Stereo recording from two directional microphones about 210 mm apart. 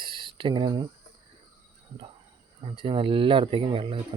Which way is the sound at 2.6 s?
25° right (ahead or behind).